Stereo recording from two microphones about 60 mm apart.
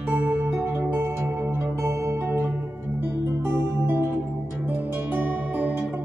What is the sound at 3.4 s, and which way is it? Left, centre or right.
Music, right.